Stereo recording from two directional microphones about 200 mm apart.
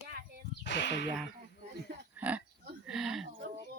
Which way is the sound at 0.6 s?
60° left (ahead or behind).